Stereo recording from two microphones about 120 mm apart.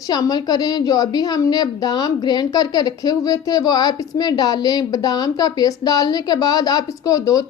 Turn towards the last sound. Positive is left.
turn(degrees=30)  # may be behind; listen again after turning